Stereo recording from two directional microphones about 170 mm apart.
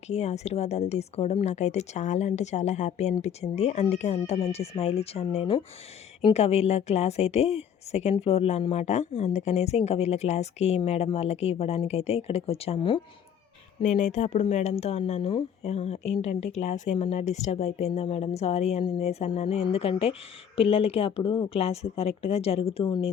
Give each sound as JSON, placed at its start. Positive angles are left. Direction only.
{"t": 0.1, "sound": "a woman's voice", "side_deg": 40}
{"t": 13.8, "sound": "a woman's voice", "side_deg": 45}